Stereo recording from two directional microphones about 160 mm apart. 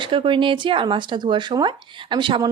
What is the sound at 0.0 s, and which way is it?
Speech, 30° right (ahead or behind).